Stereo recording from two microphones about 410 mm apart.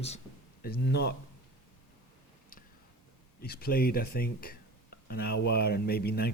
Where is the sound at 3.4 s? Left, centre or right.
Left.